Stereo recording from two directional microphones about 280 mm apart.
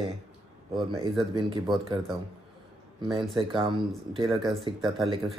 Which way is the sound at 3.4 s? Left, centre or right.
Centre.